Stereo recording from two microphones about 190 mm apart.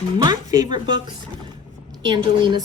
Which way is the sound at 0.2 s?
20° right (ahead or behind).